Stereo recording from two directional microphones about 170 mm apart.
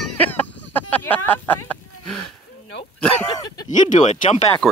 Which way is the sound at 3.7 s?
45° left (ahead or behind).